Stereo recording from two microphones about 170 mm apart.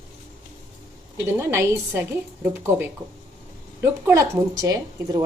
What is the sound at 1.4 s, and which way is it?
A woman's voice, 15° right (ahead or behind).